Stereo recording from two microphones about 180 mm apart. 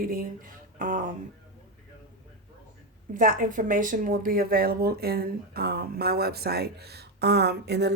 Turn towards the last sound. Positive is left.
turn(degrees=-65)  # may be behind; listen again after turning